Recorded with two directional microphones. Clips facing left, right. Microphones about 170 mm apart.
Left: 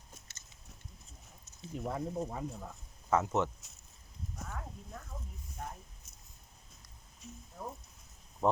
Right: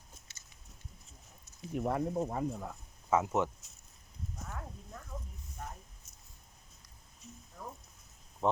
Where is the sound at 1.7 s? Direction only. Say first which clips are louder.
Right 4 dB; 65° right (ahead or behind).